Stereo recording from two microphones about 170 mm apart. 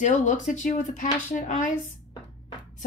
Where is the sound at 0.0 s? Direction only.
45° left (ahead or behind).